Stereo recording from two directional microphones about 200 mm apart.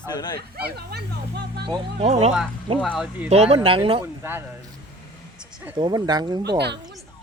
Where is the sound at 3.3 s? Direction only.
30° right (ahead or behind).